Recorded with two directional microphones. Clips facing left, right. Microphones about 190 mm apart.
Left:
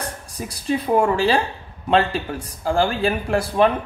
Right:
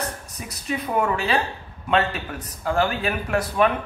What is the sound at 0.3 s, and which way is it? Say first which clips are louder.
Speech: left 6 dB; 30° left (ahead or behind).